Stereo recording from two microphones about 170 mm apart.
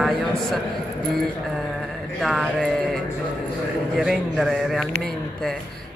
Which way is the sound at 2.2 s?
Centre (ahead or behind).